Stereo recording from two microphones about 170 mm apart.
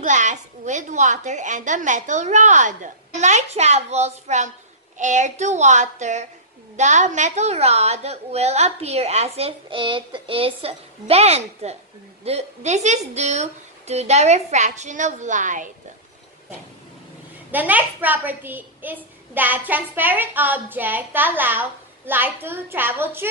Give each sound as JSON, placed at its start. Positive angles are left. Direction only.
{"t": 0.0, "sound": "a woman's voice", "side_deg": -45}
{"t": 17.5, "sound": "a woman's voice", "side_deg": -10}